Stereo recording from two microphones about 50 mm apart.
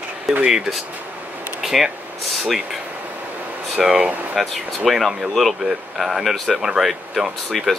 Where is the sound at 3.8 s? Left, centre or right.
Centre.